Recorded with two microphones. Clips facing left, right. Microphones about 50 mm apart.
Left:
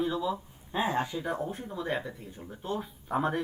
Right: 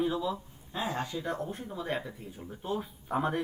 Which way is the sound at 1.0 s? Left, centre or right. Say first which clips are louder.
Left 2 dB; centre.